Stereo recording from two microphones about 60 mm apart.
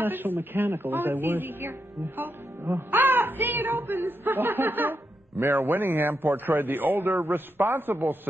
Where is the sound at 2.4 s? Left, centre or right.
Right.